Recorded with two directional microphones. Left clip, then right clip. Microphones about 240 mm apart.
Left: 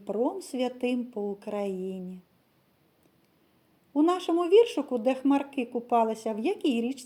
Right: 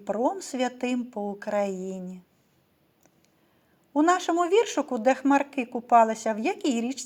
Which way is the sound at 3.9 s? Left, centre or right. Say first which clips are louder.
Right 3 dB; right.